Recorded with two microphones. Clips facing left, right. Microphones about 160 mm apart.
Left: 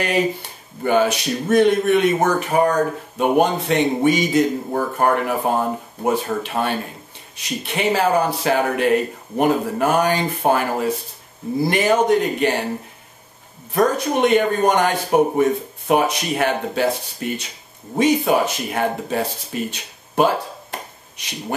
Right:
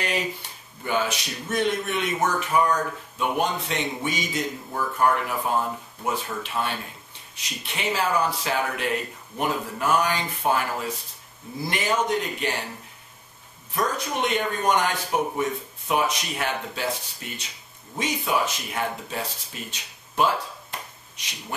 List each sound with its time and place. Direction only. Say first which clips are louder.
0.0 s speech: left 8 dB; 55° left (ahead or behind)
4.6 s speech: left 4 dB; 45° left (ahead or behind)
13.7 s speech: left 9 dB; 60° left (ahead or behind)